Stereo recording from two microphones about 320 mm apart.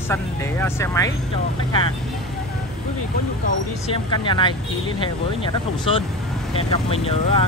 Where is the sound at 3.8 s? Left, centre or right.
Centre.